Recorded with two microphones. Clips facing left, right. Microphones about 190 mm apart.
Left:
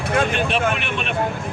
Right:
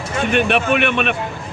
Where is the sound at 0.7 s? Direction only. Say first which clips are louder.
Right 8 dB; 65° right (ahead or behind).